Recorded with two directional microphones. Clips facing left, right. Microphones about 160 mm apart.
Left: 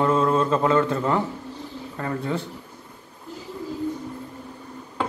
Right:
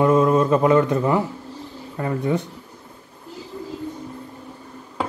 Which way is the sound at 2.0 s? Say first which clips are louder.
Right 5 dB; 15° right (ahead or behind).